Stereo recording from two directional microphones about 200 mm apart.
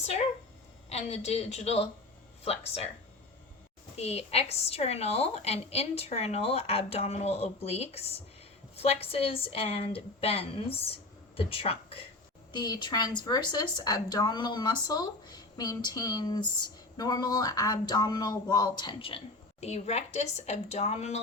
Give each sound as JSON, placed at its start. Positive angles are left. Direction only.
{"t": 0.9, "sound": "a woman's voice", "side_deg": 35}
{"t": 3.9, "sound": "a woman's voice", "side_deg": 30}